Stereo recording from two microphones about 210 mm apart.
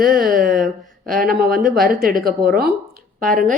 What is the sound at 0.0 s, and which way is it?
Speech, 45° right (ahead or behind).